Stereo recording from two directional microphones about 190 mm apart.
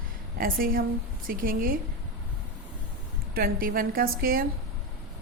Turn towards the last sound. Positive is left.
turn(degrees=-50)  # may be behind; listen again after turning